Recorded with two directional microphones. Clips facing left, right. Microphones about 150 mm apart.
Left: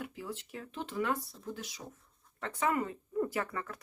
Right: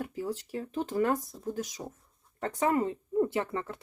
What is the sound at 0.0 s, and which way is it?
Speech, 40° right (ahead or behind).